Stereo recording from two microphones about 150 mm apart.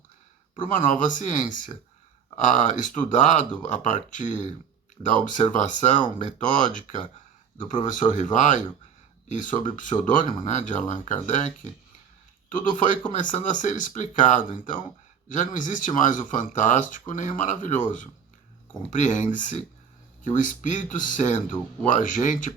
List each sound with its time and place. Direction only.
0.7 s speech: 60° left (ahead or behind)